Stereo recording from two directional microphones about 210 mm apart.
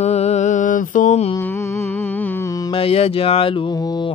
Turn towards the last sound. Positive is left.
turn(degrees=25)  # may be behind; listen again after turning